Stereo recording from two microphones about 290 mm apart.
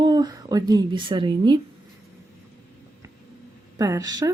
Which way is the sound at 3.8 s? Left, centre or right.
Centre.